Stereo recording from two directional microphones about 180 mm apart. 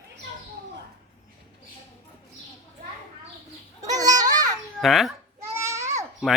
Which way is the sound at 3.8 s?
20° right (ahead or behind).